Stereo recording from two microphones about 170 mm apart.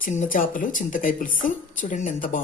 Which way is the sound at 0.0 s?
50° left (ahead or behind).